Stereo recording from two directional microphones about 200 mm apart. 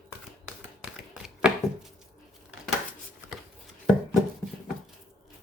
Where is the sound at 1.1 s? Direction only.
Centre (ahead or behind).